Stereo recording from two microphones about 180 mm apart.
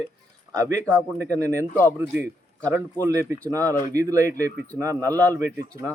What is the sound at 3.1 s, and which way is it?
Speech, 15° right (ahead or behind).